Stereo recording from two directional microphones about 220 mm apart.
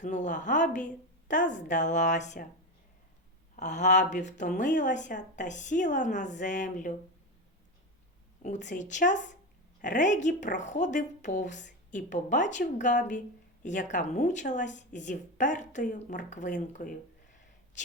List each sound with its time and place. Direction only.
0.0 s speech: 35° left (ahead or behind)
3.5 s speech: 30° left (ahead or behind)
8.4 s speech: 35° left (ahead or behind)